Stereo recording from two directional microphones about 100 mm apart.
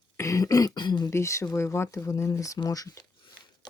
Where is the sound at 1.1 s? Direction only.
30° left (ahead or behind).